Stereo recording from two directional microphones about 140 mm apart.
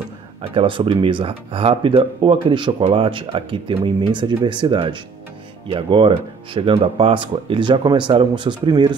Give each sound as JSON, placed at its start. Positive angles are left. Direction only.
{"t": 0.6, "sound": "speech", "side_deg": -35}